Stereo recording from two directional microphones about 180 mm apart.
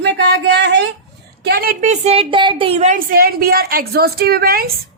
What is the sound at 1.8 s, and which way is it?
Speech, 40° right (ahead or behind).